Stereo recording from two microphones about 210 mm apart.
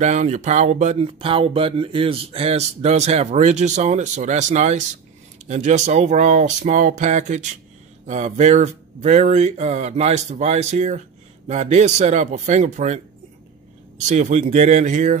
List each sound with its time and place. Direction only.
0.0 s speech: 35° right (ahead or behind)
14.0 s speech: 35° right (ahead or behind)